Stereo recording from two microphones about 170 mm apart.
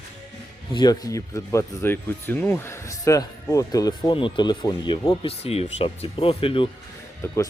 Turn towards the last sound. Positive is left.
turn(degrees=15)  # may be behind; listen again after turning